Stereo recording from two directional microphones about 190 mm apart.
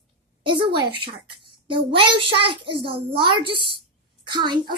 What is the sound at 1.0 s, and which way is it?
A child's voice, 25° right (ahead or behind).